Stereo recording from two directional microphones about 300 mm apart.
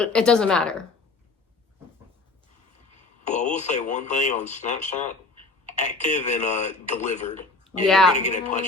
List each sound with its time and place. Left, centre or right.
0.0 s a woman's voice: centre
3.2 s speech: left
7.9 s a woman's voice: centre
8.1 s speech: left